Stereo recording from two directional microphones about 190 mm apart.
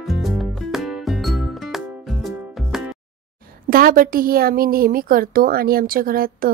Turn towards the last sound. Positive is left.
turn(degrees=-50)  # may be behind; listen again after turning